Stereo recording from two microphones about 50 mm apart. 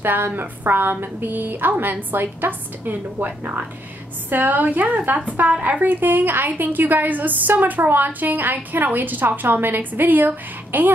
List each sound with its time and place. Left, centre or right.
0.0 s a woman's voice: right